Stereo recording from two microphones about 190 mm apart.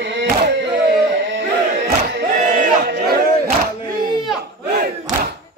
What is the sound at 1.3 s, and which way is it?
Battle cry, 65° right (ahead or behind).